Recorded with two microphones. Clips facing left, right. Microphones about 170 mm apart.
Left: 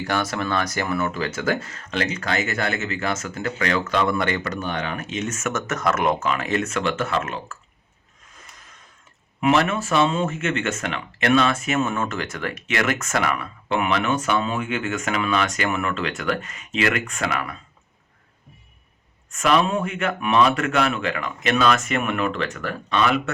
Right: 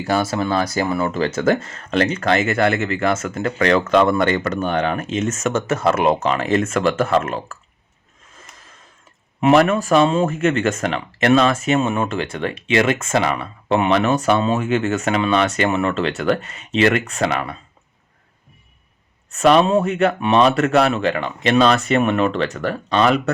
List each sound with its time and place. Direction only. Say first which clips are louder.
0.0 s speech: right 5 dB; 30° right (ahead or behind)
1.1 s speech: right 6 dB; 45° right (ahead or behind)
5.3 s speech: right 6 dB; 35° right (ahead or behind)
9.5 s speech: right 6 dB; 40° right (ahead or behind)
19.3 s speech: right 6 dB; 35° right (ahead or behind)